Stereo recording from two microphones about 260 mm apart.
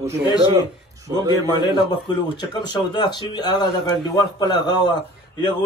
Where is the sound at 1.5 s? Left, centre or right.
Centre.